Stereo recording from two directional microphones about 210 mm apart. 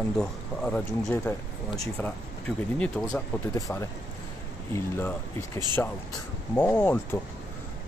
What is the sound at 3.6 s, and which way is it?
Speech, 15° left (ahead or behind).